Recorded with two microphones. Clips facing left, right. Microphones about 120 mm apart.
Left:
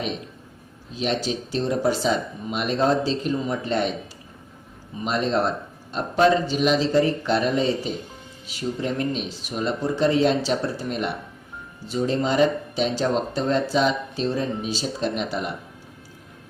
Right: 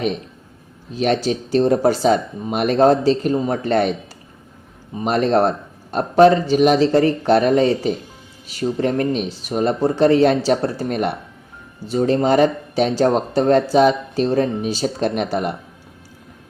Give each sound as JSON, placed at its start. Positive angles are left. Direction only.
{"t": 0.9, "sound": "speech", "side_deg": -55}
{"t": 3.3, "sound": "speech", "side_deg": -40}
{"t": 3.6, "sound": "speech", "side_deg": -55}
{"t": 5.0, "sound": "speech", "side_deg": -55}